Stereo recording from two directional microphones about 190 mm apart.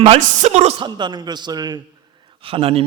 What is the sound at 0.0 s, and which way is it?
Speech, 35° right (ahead or behind).